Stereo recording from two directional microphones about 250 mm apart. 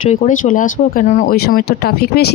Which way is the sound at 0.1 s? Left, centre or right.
Left.